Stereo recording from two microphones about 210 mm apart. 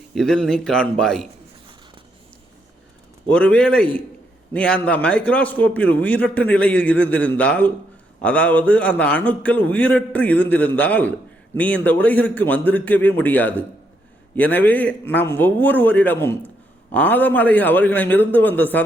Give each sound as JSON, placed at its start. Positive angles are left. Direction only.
{"t": 0.1, "sound": "a man's voice", "side_deg": 0}
{"t": 3.2, "sound": "a man's voice", "side_deg": 5}